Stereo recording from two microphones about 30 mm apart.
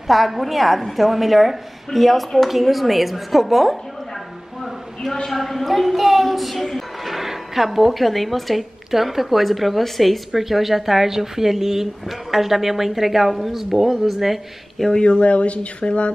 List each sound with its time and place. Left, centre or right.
0.1 s a woman's voice: centre
5.3 s speech: centre
7.2 s a woman's voice: centre
15.0 s speech: left